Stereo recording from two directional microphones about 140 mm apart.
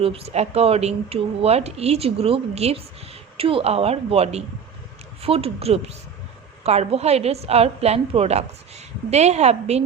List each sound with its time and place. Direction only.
0.0 s speech: 45° right (ahead or behind)